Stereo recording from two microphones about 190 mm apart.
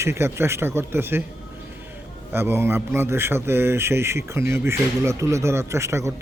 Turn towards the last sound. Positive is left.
turn(degrees=-15)  # may be behind; listen again after turning